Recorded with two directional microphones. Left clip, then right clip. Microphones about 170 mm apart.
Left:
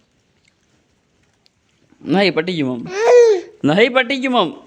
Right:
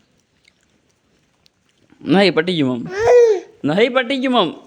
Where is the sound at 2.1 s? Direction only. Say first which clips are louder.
Right 2 dB; 5° right (ahead or behind).